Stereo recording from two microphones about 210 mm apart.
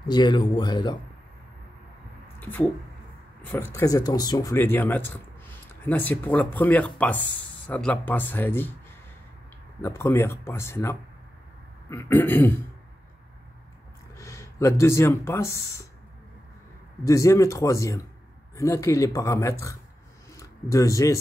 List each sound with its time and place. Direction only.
0.1 s speech: 20° left (ahead or behind)
2.4 s speech: 10° left (ahead or behind)
9.8 s speech: 15° left (ahead or behind)
14.1 s speech: 15° left (ahead or behind)
17.0 s speech: 15° left (ahead or behind)